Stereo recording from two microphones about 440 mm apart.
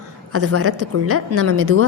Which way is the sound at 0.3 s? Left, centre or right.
Right.